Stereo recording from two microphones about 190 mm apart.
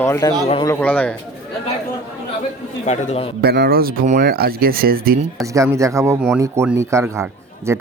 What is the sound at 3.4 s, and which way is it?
Speech, 60° right (ahead or behind).